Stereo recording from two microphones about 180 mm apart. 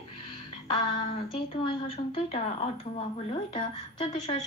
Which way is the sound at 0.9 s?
30° left (ahead or behind).